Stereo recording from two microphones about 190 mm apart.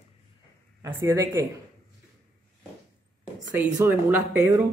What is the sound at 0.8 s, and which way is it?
Speech, 15° right (ahead or behind).